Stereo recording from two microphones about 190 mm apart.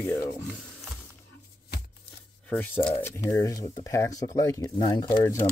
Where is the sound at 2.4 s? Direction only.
10° left (ahead or behind).